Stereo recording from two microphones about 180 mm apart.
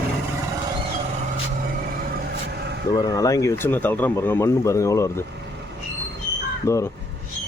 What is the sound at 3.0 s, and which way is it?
Speech, 20° left (ahead or behind).